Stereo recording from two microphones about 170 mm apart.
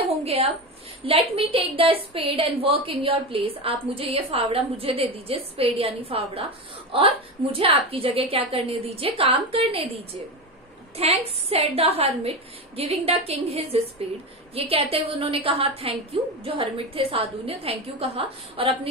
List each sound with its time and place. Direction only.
0.2 s a woman's voice: 35° right (ahead or behind)
11.0 s a woman's voice: 35° right (ahead or behind)